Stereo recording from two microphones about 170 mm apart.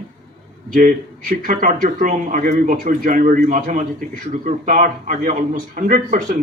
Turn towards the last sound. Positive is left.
turn(degrees=-50)  # may be behind; listen again after turning